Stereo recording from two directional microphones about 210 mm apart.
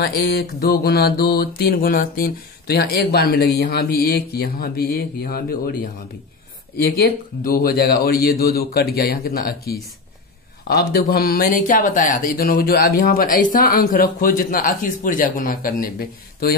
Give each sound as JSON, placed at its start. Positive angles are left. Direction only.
{"t": 0.0, "sound": "speech", "side_deg": 50}
{"t": 6.8, "sound": "speech", "side_deg": 45}